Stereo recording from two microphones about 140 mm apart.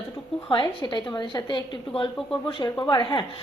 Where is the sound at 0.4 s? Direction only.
35° left (ahead or behind).